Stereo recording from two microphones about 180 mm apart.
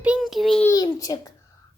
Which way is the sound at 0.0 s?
5° right (ahead or behind).